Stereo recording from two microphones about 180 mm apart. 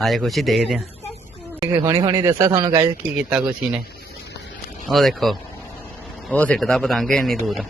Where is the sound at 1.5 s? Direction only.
20° right (ahead or behind).